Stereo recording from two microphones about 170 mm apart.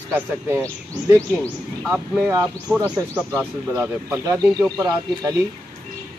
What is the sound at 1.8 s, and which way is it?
Speech, 5° right (ahead or behind).